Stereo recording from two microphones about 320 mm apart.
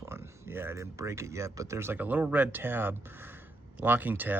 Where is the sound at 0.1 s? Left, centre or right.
Centre.